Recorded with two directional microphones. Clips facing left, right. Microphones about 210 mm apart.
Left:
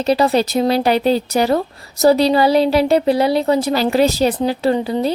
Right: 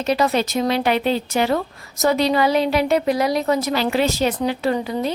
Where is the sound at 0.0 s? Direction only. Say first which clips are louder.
Left 4 dB; 35° left (ahead or behind).